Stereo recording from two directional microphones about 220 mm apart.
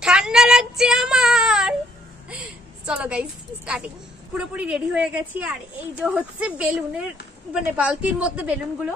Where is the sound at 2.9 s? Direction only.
5° right (ahead or behind).